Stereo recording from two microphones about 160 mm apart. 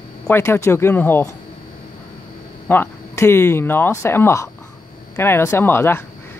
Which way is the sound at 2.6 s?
15° left (ahead or behind).